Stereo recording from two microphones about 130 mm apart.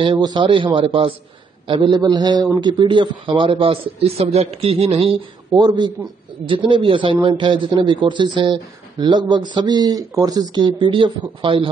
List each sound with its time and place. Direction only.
0.0 s a man's voice: 35° right (ahead or behind)
5.6 s speech: 35° right (ahead or behind)